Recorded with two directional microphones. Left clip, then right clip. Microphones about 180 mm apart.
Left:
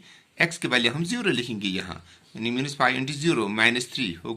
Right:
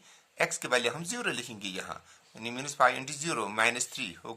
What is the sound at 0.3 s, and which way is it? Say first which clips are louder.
Speech: left 5 dB; 45° right (ahead or behind).